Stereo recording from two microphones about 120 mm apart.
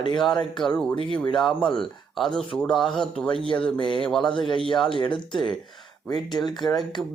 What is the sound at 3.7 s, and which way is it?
Speech, 40° left (ahead or behind).